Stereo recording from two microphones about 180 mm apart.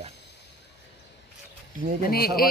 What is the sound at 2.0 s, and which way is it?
Speech, 55° left (ahead or behind).